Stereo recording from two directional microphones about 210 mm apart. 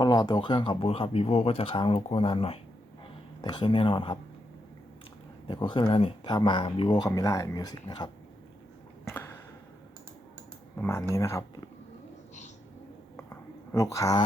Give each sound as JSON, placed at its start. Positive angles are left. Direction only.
{"t": 0.0, "sound": "speech", "side_deg": 20}
{"t": 5.5, "sound": "speech", "side_deg": 20}
{"t": 9.0, "sound": "a sound", "side_deg": 15}
{"t": 10.8, "sound": "speech", "side_deg": 10}
{"t": 13.1, "sound": "a sound", "side_deg": 10}
{"t": 13.8, "sound": "speech", "side_deg": 15}